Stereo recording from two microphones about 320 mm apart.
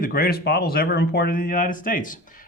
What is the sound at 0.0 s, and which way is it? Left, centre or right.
Speech, left.